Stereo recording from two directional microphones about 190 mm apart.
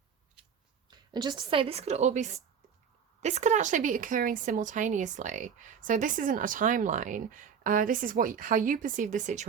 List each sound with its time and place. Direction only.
0.9 s a woman's voice: 20° right (ahead or behind); by 9.5 s 40° right (ahead or behind)